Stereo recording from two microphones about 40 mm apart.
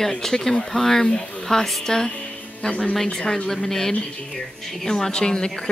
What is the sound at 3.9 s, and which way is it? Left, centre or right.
Speech, left.